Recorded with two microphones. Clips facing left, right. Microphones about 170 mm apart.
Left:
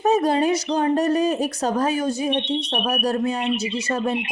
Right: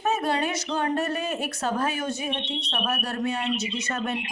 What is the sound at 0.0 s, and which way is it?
Speech, 40° left (ahead or behind).